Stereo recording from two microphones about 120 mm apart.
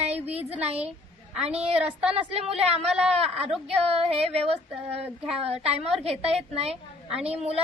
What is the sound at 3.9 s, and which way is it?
A woman's voice, 55° right (ahead or behind).